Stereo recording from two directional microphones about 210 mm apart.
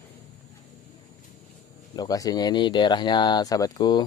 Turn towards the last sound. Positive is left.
turn(degrees=20)  # may be behind; listen again after turning